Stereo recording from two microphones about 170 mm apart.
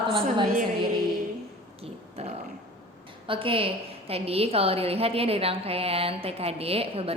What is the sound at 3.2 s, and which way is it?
A woman's voice, 30° right (ahead or behind).